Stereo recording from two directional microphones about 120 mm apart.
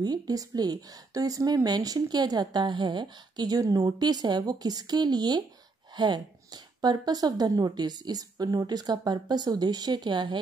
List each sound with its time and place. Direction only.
0.0 s speech: 30° right (ahead or behind)